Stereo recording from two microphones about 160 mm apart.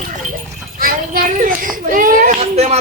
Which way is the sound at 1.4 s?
60° right (ahead or behind).